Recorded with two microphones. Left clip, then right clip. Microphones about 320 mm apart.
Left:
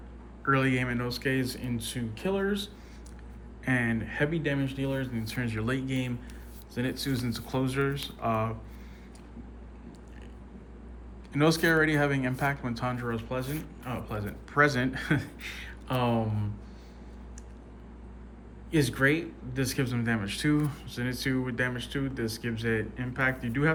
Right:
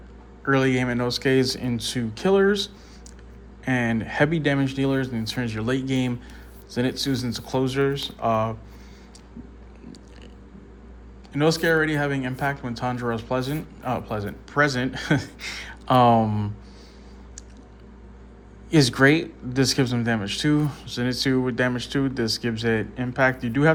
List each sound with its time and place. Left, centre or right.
0.4 s speech: centre
3.6 s speech: centre
11.3 s speech: centre
18.7 s speech: centre